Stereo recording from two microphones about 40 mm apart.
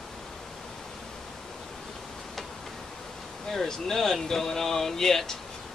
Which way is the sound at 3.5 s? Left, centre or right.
Centre.